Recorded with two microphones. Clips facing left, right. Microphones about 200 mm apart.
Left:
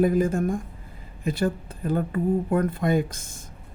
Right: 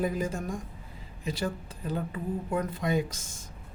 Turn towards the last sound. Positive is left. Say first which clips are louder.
# left 5 dB
turn(degrees=55)  # may be behind; listen again after turning